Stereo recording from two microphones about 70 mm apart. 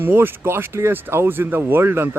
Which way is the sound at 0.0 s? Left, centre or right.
Right.